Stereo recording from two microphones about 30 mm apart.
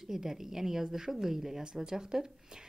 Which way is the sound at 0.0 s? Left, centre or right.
Centre.